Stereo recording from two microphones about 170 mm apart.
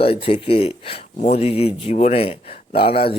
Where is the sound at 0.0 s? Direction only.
35° left (ahead or behind).